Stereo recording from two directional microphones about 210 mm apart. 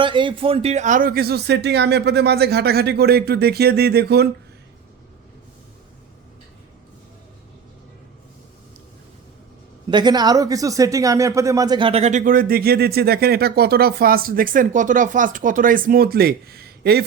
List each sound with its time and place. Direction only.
0.0 s speech: 25° right (ahead or behind); by 4.3 s 50° right (ahead or behind)
9.9 s speech: 20° right (ahead or behind); by 17.0 s 50° right (ahead or behind)